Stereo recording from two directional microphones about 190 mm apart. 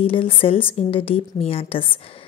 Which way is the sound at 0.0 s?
30° left (ahead or behind).